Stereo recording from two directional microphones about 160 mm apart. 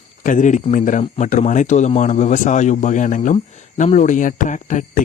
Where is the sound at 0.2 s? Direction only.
55° left (ahead or behind).